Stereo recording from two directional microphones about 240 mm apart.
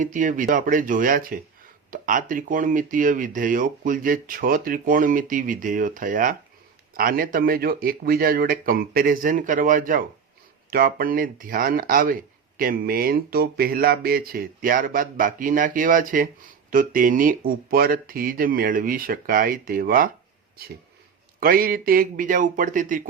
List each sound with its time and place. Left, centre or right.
0.0 s speech: right
21.4 s speech: right